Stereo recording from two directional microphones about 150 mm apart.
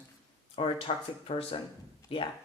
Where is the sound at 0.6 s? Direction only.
40° left (ahead or behind).